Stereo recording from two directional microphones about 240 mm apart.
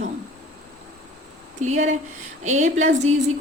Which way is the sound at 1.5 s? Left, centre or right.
Right.